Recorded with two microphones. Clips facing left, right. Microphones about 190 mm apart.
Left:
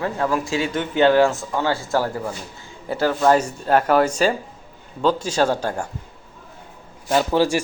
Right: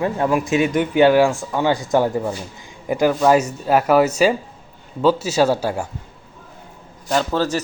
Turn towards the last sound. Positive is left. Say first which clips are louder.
# left 1 dB
turn(degrees=15)  # may be behind; listen again after turning